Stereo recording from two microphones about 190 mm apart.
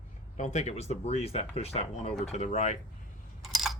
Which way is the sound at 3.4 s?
Centre (ahead or behind).